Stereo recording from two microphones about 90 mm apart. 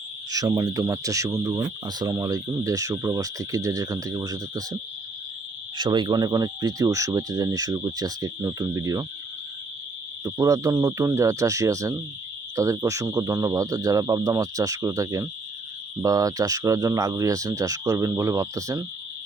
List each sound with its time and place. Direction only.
0.3 s speech: 45° right (ahead or behind)
5.7 s speech: 60° right (ahead or behind); by 9.0 s 40° right (ahead or behind)
10.2 s speech: 35° right (ahead or behind)